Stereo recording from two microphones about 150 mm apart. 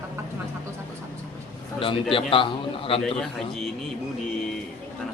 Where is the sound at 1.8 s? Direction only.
35° left (ahead or behind).